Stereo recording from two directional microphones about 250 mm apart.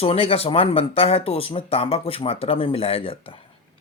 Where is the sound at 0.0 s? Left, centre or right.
Left.